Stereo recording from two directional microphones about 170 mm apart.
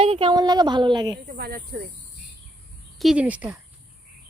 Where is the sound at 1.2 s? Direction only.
55° right (ahead or behind).